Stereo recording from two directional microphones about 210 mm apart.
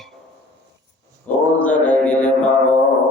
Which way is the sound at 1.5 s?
5° left (ahead or behind).